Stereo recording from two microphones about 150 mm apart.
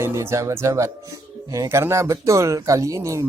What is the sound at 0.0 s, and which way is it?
Speech, 20° right (ahead or behind).